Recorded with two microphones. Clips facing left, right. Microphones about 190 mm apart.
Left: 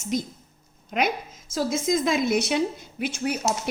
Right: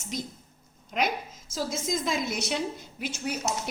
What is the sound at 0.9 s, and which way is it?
Speech, 65° left (ahead or behind).